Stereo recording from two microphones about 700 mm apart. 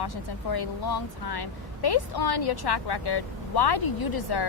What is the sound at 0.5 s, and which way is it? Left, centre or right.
A woman's voice, left.